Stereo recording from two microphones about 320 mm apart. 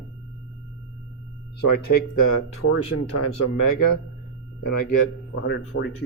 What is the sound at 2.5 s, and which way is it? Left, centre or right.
Speech, left.